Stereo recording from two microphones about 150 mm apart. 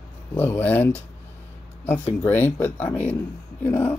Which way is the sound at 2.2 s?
15° left (ahead or behind).